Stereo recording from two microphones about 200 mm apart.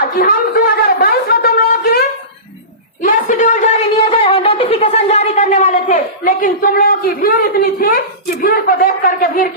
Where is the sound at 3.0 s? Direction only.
40° left (ahead or behind).